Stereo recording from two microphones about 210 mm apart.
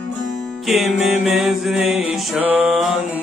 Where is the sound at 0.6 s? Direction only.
Centre (ahead or behind).